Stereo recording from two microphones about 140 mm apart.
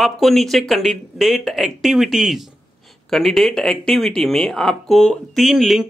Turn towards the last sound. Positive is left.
turn(degrees=0)  # may be behind; listen again after turning